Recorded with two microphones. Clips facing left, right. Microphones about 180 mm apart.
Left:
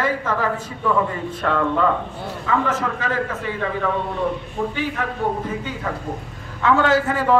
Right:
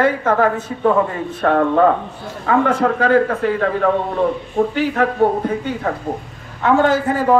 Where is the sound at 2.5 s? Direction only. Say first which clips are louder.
Right 7 dB; 60° right (ahead or behind).